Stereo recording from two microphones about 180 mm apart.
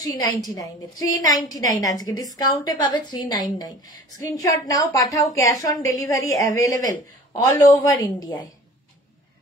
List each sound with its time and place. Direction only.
0.0 s a woman's voice: 20° left (ahead or behind)